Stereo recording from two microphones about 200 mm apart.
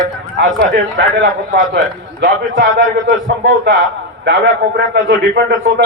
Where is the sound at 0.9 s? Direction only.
65° right (ahead or behind).